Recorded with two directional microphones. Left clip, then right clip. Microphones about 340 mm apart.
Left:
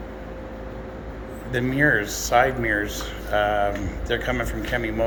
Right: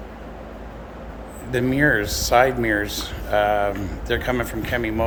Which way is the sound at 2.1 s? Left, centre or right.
Right.